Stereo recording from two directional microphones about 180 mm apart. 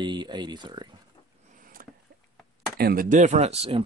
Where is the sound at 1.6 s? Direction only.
50° right (ahead or behind).